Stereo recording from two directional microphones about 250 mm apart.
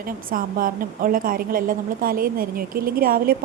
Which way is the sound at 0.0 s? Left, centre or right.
Right.